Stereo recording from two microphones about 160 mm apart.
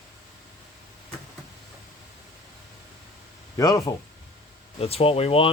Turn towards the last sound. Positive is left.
turn(degrees=35)  # may be behind; listen again after turning